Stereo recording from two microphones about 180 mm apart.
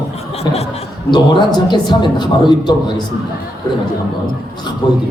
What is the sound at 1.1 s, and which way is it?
A man's voice, 25° left (ahead or behind).